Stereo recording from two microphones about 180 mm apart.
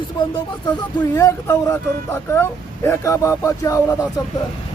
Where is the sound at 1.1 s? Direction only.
20° left (ahead or behind).